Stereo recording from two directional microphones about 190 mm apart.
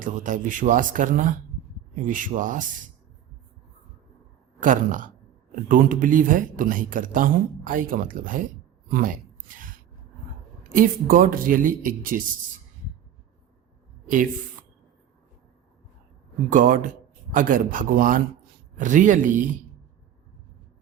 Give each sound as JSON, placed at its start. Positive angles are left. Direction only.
{"t": 0.0, "sound": "speech", "side_deg": -45}
{"t": 4.6, "sound": "speech", "side_deg": -45}
{"t": 9.6, "sound": "a sound", "side_deg": -45}
{"t": 10.6, "sound": "speech", "side_deg": -45}
{"t": 16.5, "sound": "speech", "side_deg": -45}